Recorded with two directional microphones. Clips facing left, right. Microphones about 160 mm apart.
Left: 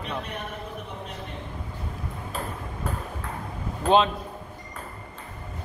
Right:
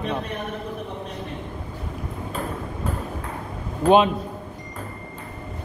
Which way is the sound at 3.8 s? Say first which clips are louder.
Right 4 dB; 15° right (ahead or behind).